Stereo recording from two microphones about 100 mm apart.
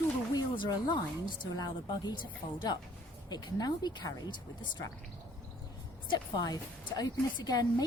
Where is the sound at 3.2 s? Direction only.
40° left (ahead or behind).